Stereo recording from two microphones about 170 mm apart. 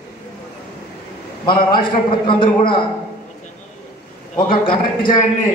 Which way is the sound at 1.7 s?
30° left (ahead or behind).